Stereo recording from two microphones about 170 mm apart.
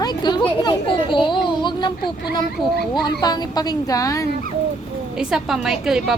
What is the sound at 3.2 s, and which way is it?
A woman's voice, 25° left (ahead or behind).